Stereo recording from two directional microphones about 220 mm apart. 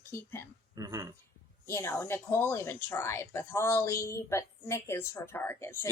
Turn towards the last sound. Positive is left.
turn(degrees=10)  # may be behind; listen again after turning